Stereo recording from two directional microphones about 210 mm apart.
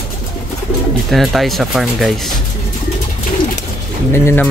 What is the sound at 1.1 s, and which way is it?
Speech, centre (ahead or behind).